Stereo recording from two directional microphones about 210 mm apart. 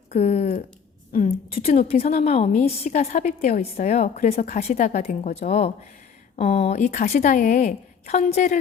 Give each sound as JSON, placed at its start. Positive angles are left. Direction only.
{"t": 0.1, "sound": "a woman's voice", "side_deg": 30}